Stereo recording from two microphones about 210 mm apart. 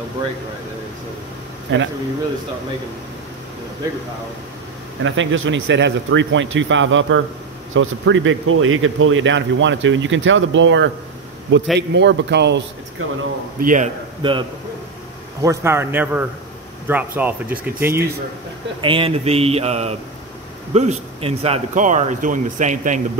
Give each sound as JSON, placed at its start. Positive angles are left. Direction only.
{"t": 1.7, "sound": "a man's voice", "side_deg": -60}
{"t": 5.0, "sound": "a man's voice", "side_deg": -65}
{"t": 13.6, "sound": "speech", "side_deg": -40}
{"t": 14.2, "sound": "speech", "side_deg": -20}
{"t": 15.4, "sound": "speech", "side_deg": -15}
{"t": 18.8, "sound": "speech", "side_deg": -25}